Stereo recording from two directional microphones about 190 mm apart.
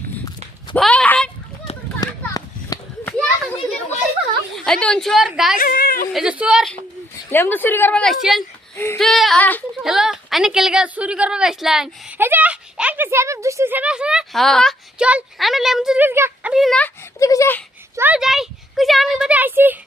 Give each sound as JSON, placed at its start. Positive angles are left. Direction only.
{"t": 0.8, "sound": "a sound", "side_deg": 5}
{"t": 2.0, "sound": "a sound", "side_deg": 20}
{"t": 4.5, "sound": "a woman's voice", "side_deg": 5}
{"t": 5.5, "sound": "a woman's voice", "side_deg": 50}
{"t": 6.1, "sound": "a woman's voice", "side_deg": -5}
{"t": 7.3, "sound": "speech", "side_deg": 10}
{"t": 8.7, "sound": "a sound", "side_deg": 15}
{"t": 9.0, "sound": "a woman's voice", "side_deg": 0}
{"t": 9.8, "sound": "a woman's voice", "side_deg": -5}
{"t": 17.2, "sound": "speech", "side_deg": 15}
{"t": 17.9, "sound": "a woman's voice", "side_deg": -10}